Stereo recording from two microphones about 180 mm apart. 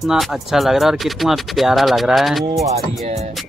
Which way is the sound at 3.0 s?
35° right (ahead or behind).